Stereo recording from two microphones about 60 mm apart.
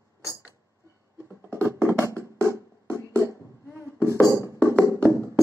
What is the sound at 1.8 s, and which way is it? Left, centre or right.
Music, right.